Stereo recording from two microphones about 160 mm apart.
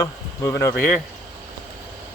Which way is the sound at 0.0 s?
15° left (ahead or behind).